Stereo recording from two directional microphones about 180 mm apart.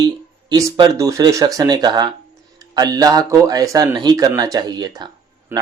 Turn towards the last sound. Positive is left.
turn(degrees=-10)  # may be behind; listen again after turning